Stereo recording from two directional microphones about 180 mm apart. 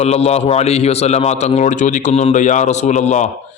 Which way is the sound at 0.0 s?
35° left (ahead or behind).